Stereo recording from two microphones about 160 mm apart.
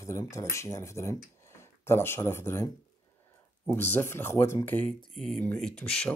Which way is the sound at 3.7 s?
15° left (ahead or behind).